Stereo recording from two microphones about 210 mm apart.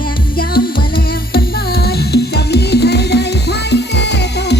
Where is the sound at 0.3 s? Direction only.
45° left (ahead or behind).